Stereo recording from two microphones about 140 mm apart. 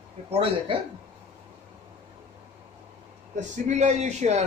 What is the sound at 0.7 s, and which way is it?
Speech, 35° right (ahead or behind).